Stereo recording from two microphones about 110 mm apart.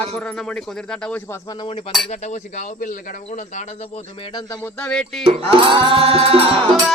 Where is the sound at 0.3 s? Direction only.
10° left (ahead or behind).